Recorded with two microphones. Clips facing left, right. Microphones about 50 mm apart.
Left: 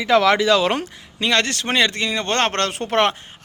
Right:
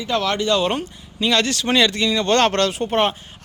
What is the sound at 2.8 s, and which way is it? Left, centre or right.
Speech, left.